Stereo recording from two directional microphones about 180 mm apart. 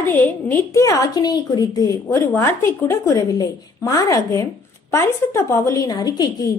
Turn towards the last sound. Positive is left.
turn(degrees=20)  # may be behind; listen again after turning